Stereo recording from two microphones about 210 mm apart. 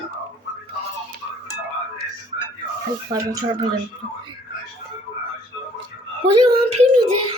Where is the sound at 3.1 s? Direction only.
15° right (ahead or behind).